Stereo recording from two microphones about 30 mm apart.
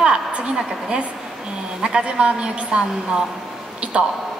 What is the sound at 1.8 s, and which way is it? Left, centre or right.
Speech, right.